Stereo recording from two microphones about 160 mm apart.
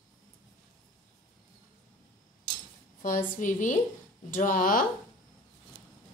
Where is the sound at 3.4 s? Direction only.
55° left (ahead or behind).